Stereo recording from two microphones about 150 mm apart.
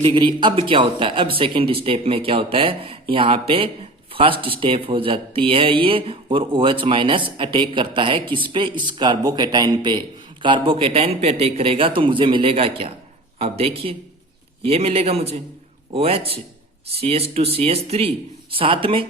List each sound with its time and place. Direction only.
0.0 s a man's voice: 35° right (ahead or behind)